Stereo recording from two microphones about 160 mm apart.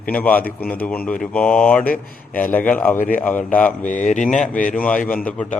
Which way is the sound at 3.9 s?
50° left (ahead or behind).